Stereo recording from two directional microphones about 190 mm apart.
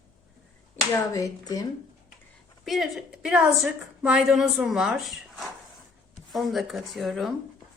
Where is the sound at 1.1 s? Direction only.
15° left (ahead or behind).